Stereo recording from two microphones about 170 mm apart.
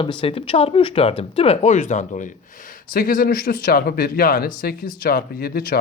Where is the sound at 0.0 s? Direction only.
30° left (ahead or behind).